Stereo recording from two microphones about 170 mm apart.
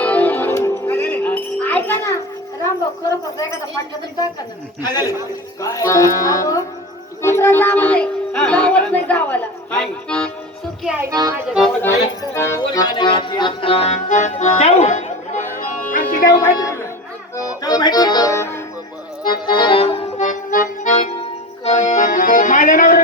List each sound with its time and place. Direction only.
0.0 s music: 10° left (ahead or behind)
4.8 s speech: 25° left (ahead or behind)
7.2 s music: 15° left (ahead or behind)
10.8 s speech: 10° right (ahead or behind)
11.1 s speech: 20° right (ahead or behind)
11.8 s accordion: 15° left (ahead or behind); by 16.0 s 50° left (ahead or behind)
16.2 s music: 20° left (ahead or behind)
19.2 s accordion: 25° left (ahead or behind); by 23.0 s 50° left (ahead or behind)